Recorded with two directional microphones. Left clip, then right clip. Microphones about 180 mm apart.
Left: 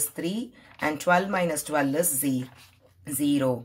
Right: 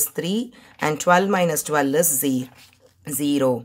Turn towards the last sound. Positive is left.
turn(degrees=-30)  # may be behind; listen again after turning